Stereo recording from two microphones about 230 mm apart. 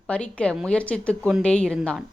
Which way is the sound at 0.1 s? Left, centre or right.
Centre.